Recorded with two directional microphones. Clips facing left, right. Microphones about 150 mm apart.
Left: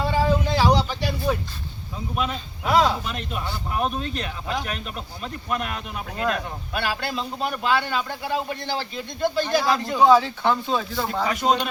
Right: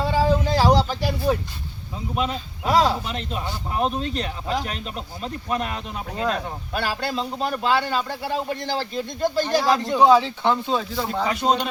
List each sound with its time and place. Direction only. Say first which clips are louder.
0.0 s a sound: right 1 dB; 35° right (ahead or behind)
2.1 s speech: right 2 dB; 30° right (ahead or behind)
10.0 s speech: left 1 dB; 20° right (ahead or behind)
11.3 s speech: even; 30° right (ahead or behind)